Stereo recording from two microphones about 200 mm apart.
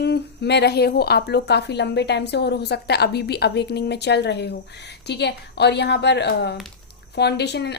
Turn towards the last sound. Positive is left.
turn(degrees=55)  # may be behind; listen again after turning